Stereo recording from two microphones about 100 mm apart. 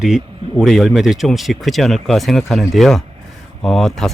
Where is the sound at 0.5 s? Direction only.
Centre (ahead or behind).